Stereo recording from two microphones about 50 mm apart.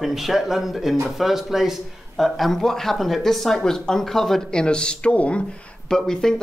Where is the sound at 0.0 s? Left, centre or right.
Centre.